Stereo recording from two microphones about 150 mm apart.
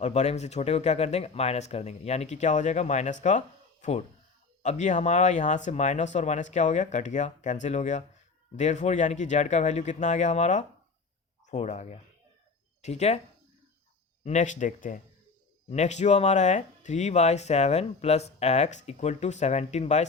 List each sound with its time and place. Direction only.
0.0 s speech: 50° left (ahead or behind)
14.3 s speech: 55° left (ahead or behind)